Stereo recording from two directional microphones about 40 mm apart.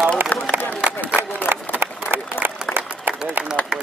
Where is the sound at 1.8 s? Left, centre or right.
Right.